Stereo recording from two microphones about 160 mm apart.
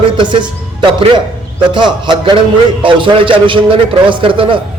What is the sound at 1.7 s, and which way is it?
A man's voice, 30° right (ahead or behind).